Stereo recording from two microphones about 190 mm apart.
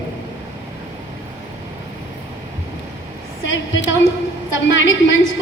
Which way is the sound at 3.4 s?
80° left.